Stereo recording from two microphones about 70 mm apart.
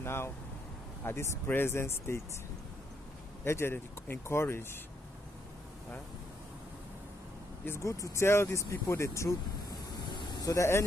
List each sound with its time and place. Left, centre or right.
0.0 s speech: left
3.4 s speech: left
7.6 s speech: left
9.7 s vehicle: left